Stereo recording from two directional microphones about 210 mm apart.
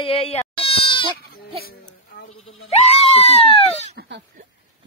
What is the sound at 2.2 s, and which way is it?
Bleat, 75° left (ahead or behind).